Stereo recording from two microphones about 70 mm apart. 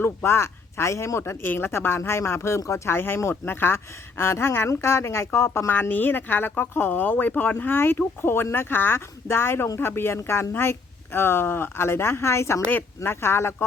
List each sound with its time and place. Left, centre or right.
0.0 s speech: left